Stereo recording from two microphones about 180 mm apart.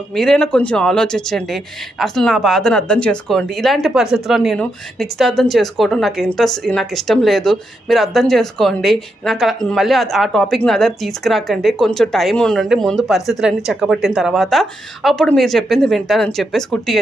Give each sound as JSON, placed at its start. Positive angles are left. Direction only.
{"t": 0.1, "sound": "speech", "side_deg": 0}